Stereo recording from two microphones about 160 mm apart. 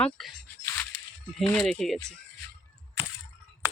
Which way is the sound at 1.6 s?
Centre (ahead or behind).